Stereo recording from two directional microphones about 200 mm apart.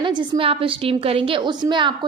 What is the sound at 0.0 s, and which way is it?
A woman's voice, 25° right (ahead or behind).